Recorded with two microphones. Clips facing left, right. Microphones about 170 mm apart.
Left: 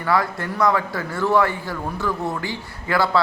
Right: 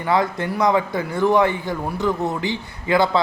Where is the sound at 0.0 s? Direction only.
20° right (ahead or behind).